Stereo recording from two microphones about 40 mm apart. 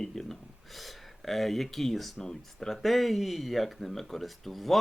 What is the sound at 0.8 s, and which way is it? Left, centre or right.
Speech, centre.